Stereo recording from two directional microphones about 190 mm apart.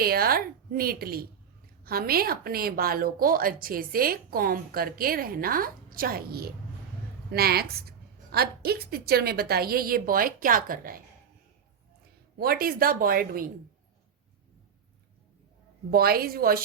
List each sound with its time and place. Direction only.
0.0 s a woman's voice: 50° right (ahead or behind)
12.4 s a woman's voice: 50° right (ahead or behind)
15.9 s a woman's voice: 50° right (ahead or behind)